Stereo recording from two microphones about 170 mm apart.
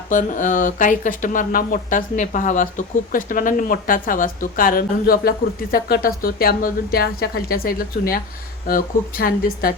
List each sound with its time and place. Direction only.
0.1 s a woman's voice: 50° left (ahead or behind)